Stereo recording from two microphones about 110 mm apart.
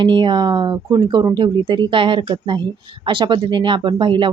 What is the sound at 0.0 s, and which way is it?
Speech, 50° right (ahead or behind).